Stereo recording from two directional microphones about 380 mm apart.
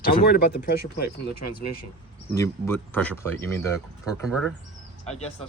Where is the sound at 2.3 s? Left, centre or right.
Centre.